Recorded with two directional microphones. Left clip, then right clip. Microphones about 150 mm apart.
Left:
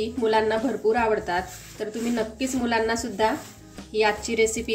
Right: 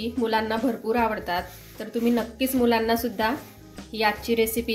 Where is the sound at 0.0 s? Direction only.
40° right (ahead or behind).